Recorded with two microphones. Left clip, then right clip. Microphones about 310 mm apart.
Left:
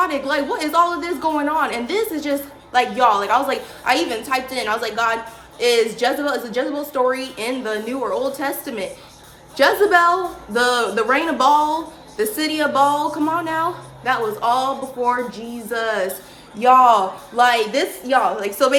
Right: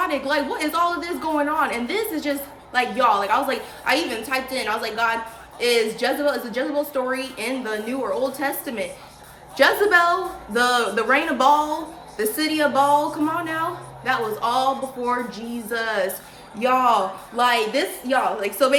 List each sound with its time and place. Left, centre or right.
0.0 s a woman's voice: centre